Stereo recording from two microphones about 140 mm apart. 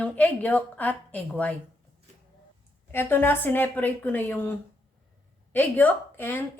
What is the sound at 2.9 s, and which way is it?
A woman's voice, 15° left (ahead or behind).